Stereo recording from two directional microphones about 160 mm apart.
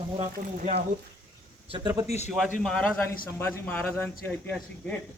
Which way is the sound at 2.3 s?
Centre (ahead or behind).